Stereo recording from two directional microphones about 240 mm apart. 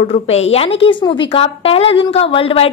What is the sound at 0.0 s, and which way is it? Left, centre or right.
A woman's voice, left.